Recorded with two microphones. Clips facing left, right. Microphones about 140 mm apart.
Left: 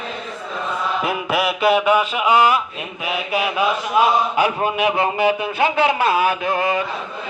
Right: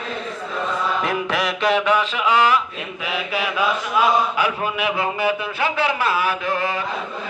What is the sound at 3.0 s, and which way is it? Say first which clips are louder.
Speech: left 3 dB; 20° left (ahead or behind).